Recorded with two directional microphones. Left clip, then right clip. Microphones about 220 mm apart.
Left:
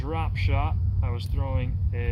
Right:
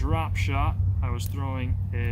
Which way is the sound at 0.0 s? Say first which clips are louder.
Right 2 dB; 5° right (ahead or behind).